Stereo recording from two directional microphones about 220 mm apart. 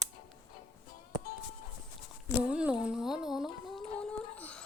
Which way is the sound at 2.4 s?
5° right (ahead or behind).